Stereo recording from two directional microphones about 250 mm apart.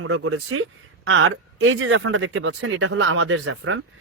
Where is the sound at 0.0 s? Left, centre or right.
Right.